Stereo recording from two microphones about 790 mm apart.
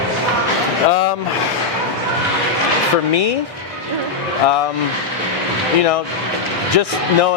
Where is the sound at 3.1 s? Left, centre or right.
Left.